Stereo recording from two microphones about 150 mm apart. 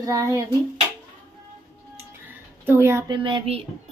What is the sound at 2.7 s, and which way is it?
Speech, 15° right (ahead or behind).